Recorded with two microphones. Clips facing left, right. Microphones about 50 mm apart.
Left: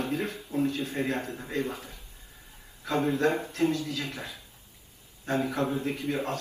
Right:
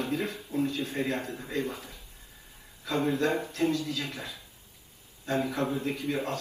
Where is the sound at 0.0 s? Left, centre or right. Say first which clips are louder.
Even; left.